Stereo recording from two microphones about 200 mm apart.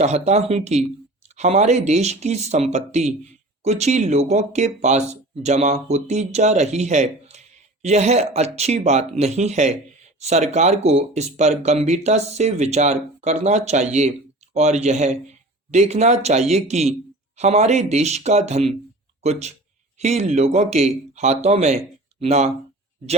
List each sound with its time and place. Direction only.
0.0 s speech: 35° right (ahead or behind)